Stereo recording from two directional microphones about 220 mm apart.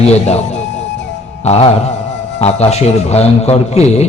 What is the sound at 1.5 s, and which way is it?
A man's voice, 25° left (ahead or behind).